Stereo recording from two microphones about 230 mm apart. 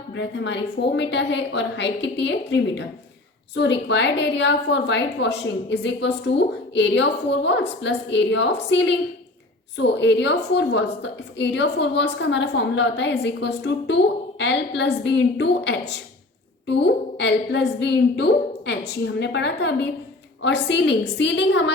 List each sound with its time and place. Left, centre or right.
0.1 s a woman's voice: left